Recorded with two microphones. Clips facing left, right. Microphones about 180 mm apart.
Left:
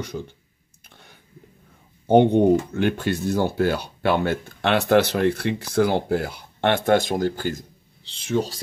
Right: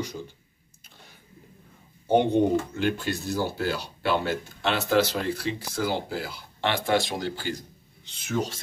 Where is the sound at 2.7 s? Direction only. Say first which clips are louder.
Left 4 dB; 55° left (ahead or behind).